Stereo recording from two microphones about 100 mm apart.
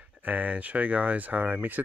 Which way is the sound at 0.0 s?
15° right (ahead or behind).